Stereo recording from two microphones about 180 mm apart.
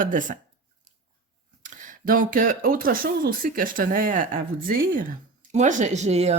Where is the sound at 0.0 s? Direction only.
45° right (ahead or behind).